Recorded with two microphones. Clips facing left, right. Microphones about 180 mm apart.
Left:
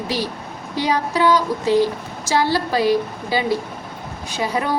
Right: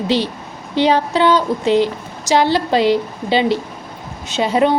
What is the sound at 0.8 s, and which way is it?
A woman's voice, 25° right (ahead or behind).